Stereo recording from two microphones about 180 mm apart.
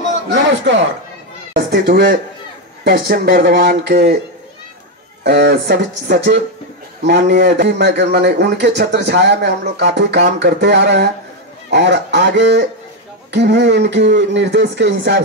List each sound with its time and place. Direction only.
0.3 s speech: 85° right
1.7 s speech: 60° right (ahead or behind)
5.2 s a man's voice: 65° right (ahead or behind)
7.3 s a man's voice: 65° right (ahead or behind)